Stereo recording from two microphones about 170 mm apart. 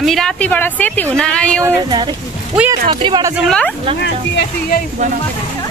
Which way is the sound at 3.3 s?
Centre (ahead or behind).